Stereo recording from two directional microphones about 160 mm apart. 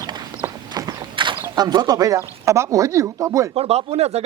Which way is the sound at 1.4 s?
25° right (ahead or behind).